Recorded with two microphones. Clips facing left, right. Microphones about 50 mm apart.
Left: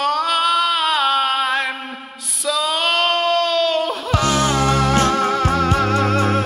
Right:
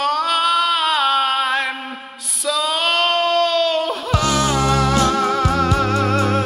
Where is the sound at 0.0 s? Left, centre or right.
Centre.